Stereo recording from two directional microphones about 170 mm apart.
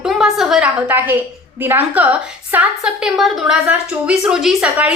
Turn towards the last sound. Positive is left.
turn(degrees=-5)  # may be behind; listen again after turning